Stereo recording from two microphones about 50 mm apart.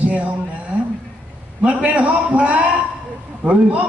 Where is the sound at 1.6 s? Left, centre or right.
Right.